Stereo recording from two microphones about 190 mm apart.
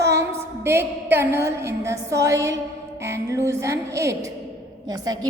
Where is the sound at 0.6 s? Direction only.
10° right (ahead or behind).